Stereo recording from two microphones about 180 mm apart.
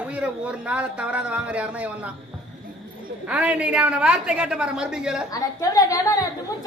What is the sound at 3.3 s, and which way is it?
A woman's voice, 5° right (ahead or behind).